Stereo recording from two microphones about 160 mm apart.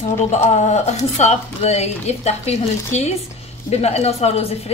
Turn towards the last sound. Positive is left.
turn(degrees=40)  # may be behind; listen again after turning